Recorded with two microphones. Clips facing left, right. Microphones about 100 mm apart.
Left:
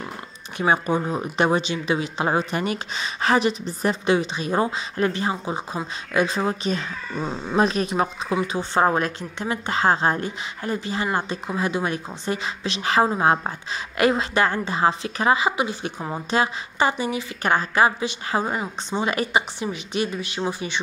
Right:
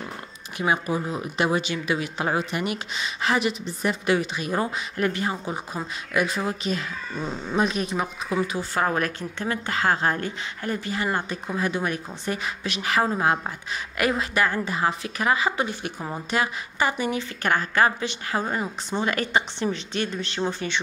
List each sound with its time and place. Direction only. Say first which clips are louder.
0.6 s speech: left 3 dB; 30° left (ahead or behind)
4.0 s a woman's voice: left 2 dB; 25° left (ahead or behind)
7.5 s speech: left 3 dB; 40° left (ahead or behind)
8.5 s a woman's voice: left 4 dB; 30° left (ahead or behind)